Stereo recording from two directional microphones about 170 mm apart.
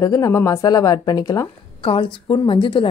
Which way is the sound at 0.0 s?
20° left (ahead or behind).